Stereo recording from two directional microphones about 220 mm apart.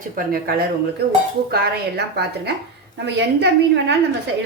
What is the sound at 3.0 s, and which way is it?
Speech, 50° right (ahead or behind).